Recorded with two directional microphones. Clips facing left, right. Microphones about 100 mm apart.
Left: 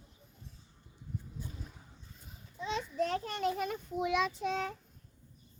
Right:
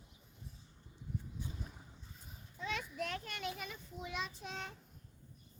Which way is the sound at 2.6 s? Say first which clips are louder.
Left 5 dB; 25° left (ahead or behind).